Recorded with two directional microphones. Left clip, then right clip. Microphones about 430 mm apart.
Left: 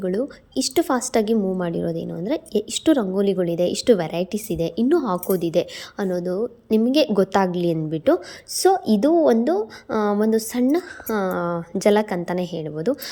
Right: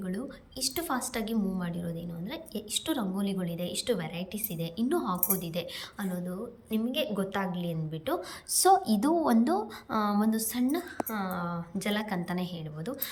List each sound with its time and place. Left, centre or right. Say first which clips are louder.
0.0 s a woman's voice: left 14 dB; centre